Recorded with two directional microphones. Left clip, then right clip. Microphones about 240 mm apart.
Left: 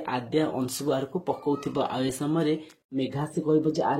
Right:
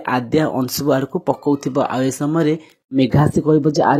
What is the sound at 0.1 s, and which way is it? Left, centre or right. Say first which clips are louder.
Speech: right 9 dB; right.